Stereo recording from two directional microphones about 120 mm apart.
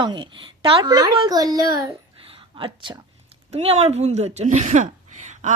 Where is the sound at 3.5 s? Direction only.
60° right (ahead or behind).